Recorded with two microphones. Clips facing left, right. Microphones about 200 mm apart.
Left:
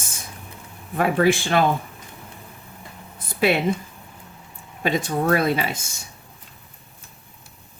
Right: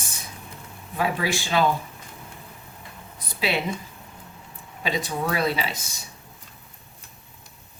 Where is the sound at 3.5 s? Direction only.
50° left (ahead or behind).